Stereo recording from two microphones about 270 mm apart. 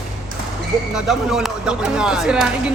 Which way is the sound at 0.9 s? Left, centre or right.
Centre.